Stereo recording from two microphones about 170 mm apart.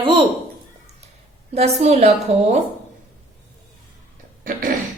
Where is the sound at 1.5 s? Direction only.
40° right (ahead or behind).